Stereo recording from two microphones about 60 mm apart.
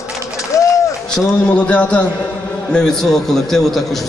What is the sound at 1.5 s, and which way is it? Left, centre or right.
A man's voice, left.